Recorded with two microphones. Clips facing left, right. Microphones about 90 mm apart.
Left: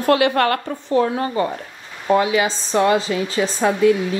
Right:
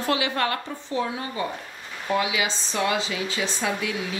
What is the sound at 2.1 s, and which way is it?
A woman's voice, 40° left (ahead or behind).